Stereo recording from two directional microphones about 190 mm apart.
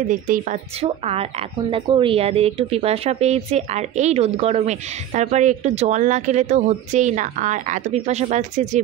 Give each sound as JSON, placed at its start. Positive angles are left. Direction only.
{"t": 0.1, "sound": "speech", "side_deg": -45}
{"t": 0.8, "sound": "speech", "side_deg": -30}